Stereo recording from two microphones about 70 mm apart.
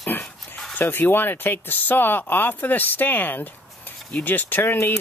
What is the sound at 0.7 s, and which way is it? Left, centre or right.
Speech, left.